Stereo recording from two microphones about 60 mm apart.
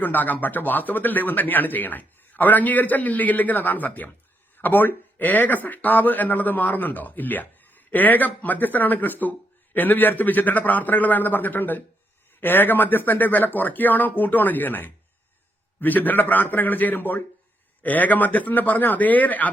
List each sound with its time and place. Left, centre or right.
0.0 s speech: left